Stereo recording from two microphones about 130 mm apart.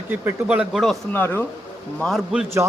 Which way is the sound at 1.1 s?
15° left (ahead or behind).